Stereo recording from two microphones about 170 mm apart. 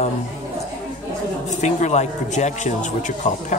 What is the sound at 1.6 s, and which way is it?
A man's voice, 40° left (ahead or behind).